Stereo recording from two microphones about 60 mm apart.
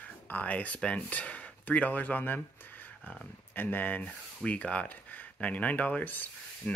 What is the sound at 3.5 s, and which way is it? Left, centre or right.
Speech, left.